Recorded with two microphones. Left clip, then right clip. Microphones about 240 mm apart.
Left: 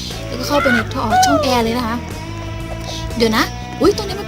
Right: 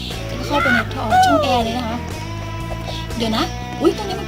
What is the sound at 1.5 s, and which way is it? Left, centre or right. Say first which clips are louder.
Speech: left 2 dB; left.